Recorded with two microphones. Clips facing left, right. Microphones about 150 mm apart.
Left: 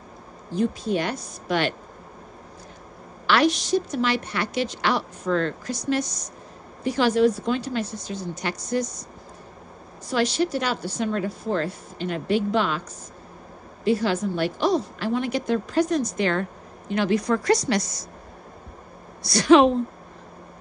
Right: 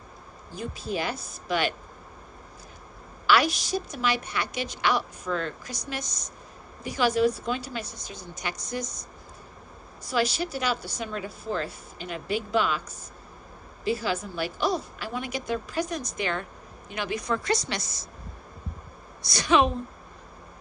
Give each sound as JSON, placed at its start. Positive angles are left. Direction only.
{"t": 0.5, "sound": "a woman's voice", "side_deg": -5}
{"t": 3.3, "sound": "a woman's voice", "side_deg": -10}
{"t": 10.0, "sound": "a woman's voice", "side_deg": -5}
{"t": 13.8, "sound": "a woman's voice", "side_deg": -5}
{"t": 19.2, "sound": "a woman's voice", "side_deg": -20}